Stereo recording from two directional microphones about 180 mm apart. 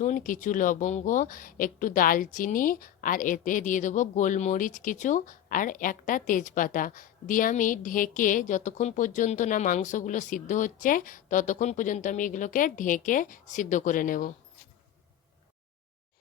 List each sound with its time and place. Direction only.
0.0 s a woman's voice: 45° left (ahead or behind)